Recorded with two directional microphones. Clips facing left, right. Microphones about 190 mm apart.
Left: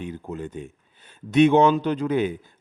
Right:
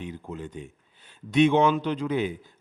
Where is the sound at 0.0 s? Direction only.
45° left (ahead or behind).